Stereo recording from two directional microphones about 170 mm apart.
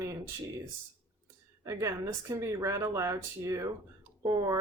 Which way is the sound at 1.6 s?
20° right (ahead or behind).